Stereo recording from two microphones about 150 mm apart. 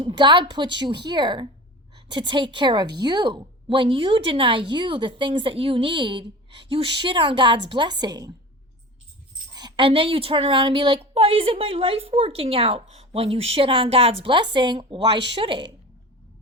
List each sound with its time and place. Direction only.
0.0 s a woman's voice: 30° right (ahead or behind)
9.6 s a woman's voice: 30° right (ahead or behind)